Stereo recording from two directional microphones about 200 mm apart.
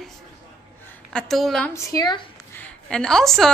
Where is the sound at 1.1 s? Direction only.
Centre (ahead or behind).